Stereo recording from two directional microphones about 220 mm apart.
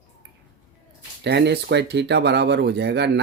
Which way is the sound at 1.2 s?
50° right (ahead or behind).